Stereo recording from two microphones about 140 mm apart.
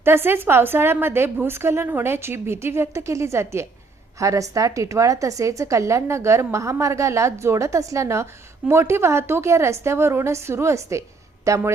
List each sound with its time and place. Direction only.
0.0 s a woman's voice: 15° right (ahead or behind)